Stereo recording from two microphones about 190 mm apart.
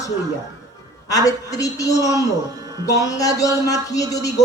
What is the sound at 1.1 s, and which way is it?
Speech, 20° left (ahead or behind).